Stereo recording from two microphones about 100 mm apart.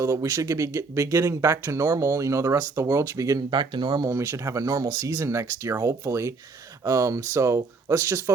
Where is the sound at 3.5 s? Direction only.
50° right (ahead or behind).